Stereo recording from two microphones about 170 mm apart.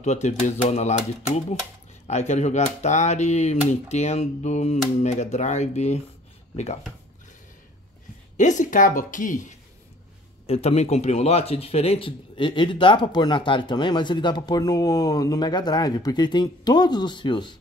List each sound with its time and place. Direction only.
0.0 s speech: 45° left (ahead or behind)
8.4 s speech: 45° left (ahead or behind)
10.4 s speech: 35° left (ahead or behind)